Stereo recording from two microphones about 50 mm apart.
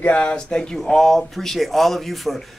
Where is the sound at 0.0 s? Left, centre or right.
Left.